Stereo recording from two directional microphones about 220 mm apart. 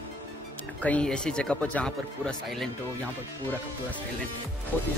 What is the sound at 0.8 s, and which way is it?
Speech, 5° left (ahead or behind).